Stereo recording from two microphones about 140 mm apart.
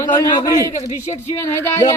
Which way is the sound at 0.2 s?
25° left (ahead or behind).